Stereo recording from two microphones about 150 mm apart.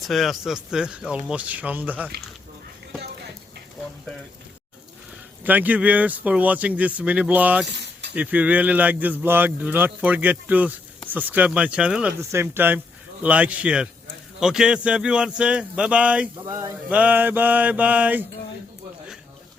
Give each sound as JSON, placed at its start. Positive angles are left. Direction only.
{"t": 0.0, "sound": "speech", "side_deg": 0}
{"t": 5.4, "sound": "speech", "side_deg": -10}
{"t": 16.5, "sound": "a sound", "side_deg": -25}
{"t": 16.9, "sound": "speech", "side_deg": -10}